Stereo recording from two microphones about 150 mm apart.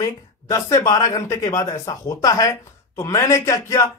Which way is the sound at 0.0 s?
20° left (ahead or behind).